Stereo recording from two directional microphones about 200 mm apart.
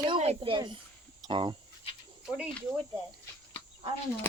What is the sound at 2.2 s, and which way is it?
Speech, 5° right (ahead or behind).